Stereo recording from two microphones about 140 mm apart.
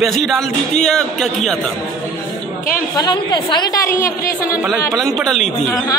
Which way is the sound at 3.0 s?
30° left (ahead or behind).